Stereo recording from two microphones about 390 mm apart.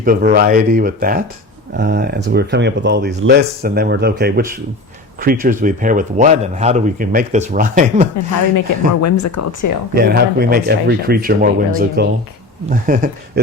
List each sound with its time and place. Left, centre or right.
0.0 s speech: right
9.0 s speech: left
9.9 s speech: right